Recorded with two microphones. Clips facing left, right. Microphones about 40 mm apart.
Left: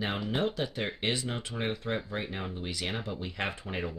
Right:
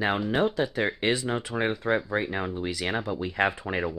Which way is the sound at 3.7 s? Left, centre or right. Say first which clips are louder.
Right 7 dB; right.